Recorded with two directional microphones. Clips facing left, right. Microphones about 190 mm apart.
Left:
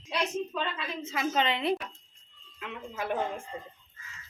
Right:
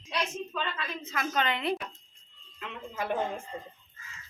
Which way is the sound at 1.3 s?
25° left (ahead or behind).